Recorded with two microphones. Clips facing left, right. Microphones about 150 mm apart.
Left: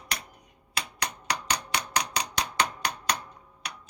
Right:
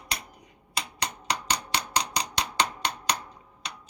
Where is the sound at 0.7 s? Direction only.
20° right (ahead or behind).